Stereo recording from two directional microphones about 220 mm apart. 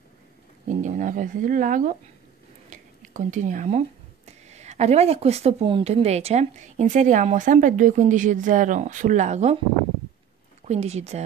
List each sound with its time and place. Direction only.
0.8 s speech: 35° right (ahead or behind)
2.7 s a sound: 35° right (ahead or behind)
4.3 s speech: 30° right (ahead or behind)
10.7 s speech: 30° right (ahead or behind)